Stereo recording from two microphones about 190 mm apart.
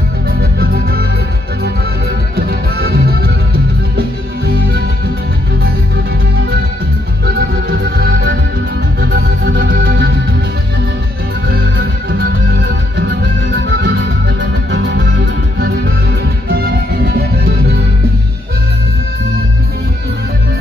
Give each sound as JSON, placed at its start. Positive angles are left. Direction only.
{"t": 0.3, "sound": "music", "side_deg": -55}
{"t": 2.3, "sound": "music", "side_deg": -55}
{"t": 8.0, "sound": "music", "side_deg": -60}
{"t": 12.1, "sound": "music", "side_deg": -55}
{"t": 16.4, "sound": "music", "side_deg": -55}